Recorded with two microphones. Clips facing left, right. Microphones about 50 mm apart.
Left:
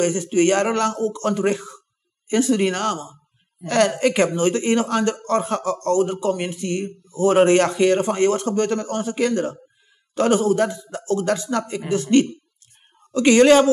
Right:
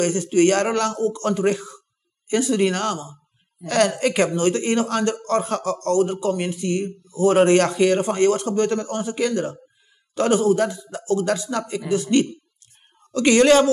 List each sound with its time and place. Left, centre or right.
0.0 s a woman's voice: left